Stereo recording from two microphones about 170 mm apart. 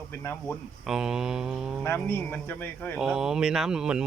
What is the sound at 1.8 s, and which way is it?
Speech, 10° left (ahead or behind).